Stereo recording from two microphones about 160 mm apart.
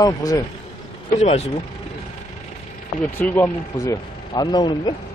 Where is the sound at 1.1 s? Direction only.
45° left (ahead or behind).